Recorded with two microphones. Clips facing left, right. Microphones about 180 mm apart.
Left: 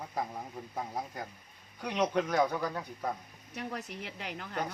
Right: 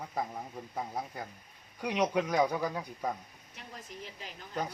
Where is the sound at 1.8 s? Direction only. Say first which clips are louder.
Even; 10° right (ahead or behind).